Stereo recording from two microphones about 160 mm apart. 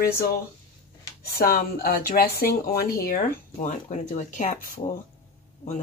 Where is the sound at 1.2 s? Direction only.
65° left (ahead or behind).